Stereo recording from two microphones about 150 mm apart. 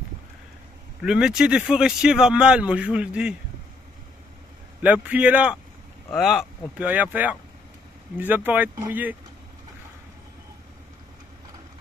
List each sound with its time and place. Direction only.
1.0 s speech: 5° right (ahead or behind)
4.8 s speech: 10° right (ahead or behind)